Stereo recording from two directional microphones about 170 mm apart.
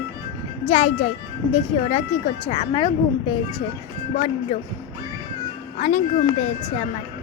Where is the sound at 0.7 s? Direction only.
40° left (ahead or behind).